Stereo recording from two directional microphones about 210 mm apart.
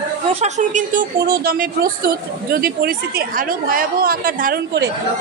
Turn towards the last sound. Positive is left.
turn(degrees=-45)  # may be behind; listen again after turning